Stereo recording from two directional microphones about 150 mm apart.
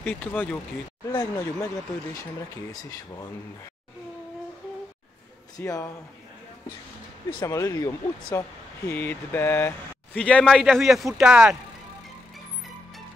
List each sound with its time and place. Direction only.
0.0 s speech: 10° left (ahead or behind); by 3.3 s 25° left (ahead or behind)
5.6 s speech: 20° left (ahead or behind)
7.2 s speech: 25° left (ahead or behind); by 11.5 s 5° right (ahead or behind)